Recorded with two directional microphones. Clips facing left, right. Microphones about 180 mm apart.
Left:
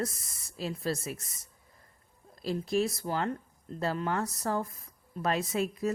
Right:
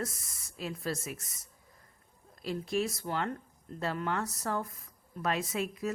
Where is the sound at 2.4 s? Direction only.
35° left (ahead or behind).